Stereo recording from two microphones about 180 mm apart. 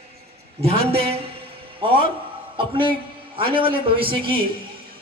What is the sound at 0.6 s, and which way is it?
A man's voice, 35° right (ahead or behind).